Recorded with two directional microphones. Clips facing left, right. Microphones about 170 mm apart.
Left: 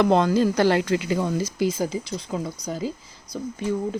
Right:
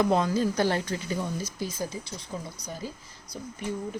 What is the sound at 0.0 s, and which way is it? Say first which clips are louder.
Speech: left 5 dB; 80° left.